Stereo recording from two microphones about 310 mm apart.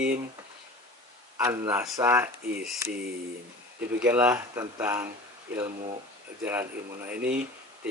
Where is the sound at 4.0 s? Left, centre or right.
Centre.